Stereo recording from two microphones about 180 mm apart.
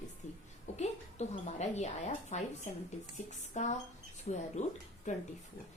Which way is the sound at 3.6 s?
40° left (ahead or behind).